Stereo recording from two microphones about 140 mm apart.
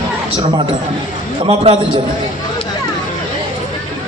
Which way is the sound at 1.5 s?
45° right (ahead or behind).